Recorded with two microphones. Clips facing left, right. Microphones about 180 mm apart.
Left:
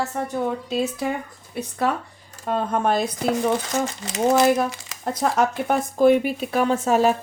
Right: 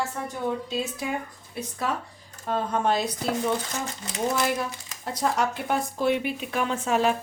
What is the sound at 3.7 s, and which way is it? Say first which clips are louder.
Speech: left 8 dB; 90° left.